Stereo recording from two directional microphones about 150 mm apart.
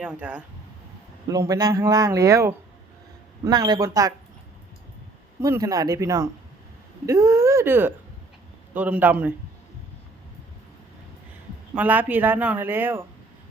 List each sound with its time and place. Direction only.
0.0 s speech: 10° right (ahead or behind)
1.3 s speech: 25° right (ahead or behind)
5.4 s speech: 20° right (ahead or behind)
11.7 s speech: 10° right (ahead or behind)